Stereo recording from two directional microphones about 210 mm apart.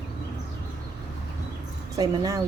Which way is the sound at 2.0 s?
15° right (ahead or behind).